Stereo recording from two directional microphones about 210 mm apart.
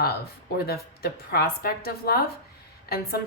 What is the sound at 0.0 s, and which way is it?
Speech, 50° left (ahead or behind).